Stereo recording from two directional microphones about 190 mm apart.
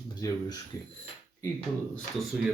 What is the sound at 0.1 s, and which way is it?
Speech, 20° left (ahead or behind).